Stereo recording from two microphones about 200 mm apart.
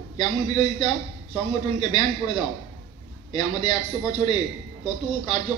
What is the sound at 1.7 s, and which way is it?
Speech, 20° left (ahead or behind).